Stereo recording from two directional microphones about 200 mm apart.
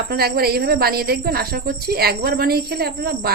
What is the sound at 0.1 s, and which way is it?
A woman's voice, 50° right (ahead or behind).